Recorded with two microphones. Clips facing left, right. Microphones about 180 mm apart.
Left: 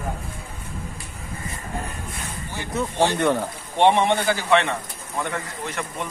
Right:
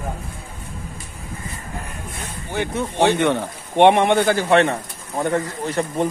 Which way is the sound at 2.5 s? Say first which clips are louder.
Right 4 dB; 60° right (ahead or behind).